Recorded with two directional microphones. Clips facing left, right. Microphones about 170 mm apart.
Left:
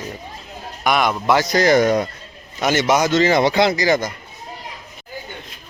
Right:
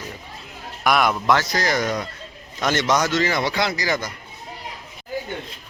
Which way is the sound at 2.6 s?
10° left (ahead or behind).